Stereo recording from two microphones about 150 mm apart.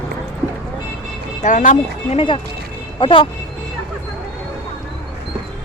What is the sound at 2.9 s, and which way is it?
Speech, 35° left (ahead or behind).